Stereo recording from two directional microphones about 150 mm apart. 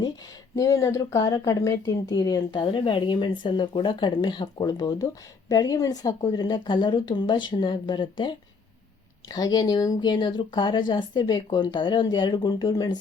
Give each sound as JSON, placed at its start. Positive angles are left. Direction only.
{"t": 0.5, "sound": "speech", "side_deg": 20}